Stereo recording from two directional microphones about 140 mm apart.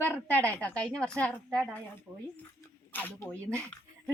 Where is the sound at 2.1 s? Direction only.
10° right (ahead or behind).